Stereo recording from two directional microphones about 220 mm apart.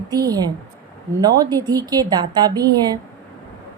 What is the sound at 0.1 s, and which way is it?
A woman's voice, 15° right (ahead or behind).